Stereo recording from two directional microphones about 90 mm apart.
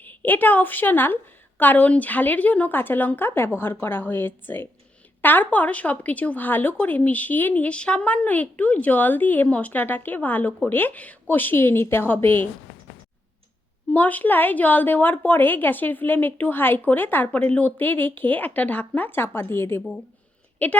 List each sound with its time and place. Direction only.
0.0 s speech: 20° left (ahead or behind)
13.9 s a woman's voice: 20° left (ahead or behind)